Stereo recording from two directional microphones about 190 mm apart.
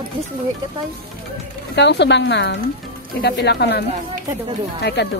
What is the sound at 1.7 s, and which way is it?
A woman's voice, 65° left (ahead or behind).